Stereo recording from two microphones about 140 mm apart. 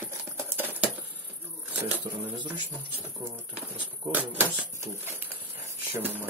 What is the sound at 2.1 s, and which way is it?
Speech, 35° right (ahead or behind).